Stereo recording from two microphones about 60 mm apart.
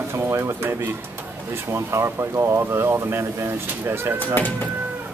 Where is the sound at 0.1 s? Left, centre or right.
Right.